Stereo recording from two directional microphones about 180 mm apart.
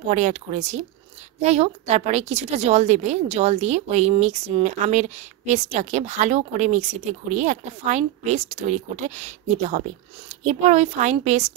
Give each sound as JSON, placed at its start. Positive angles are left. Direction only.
{"t": 0.1, "sound": "a woman's voice", "side_deg": -40}